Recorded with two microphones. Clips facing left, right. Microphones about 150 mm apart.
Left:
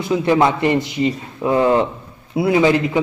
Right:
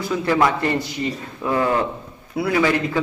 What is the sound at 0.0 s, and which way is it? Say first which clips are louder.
A man's voice: left 4 dB; 20° left (ahead or behind).